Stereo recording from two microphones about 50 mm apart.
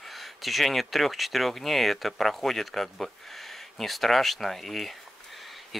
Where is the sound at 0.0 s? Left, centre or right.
Centre.